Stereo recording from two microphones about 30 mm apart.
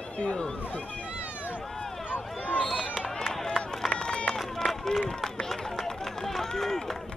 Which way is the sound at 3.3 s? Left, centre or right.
Centre.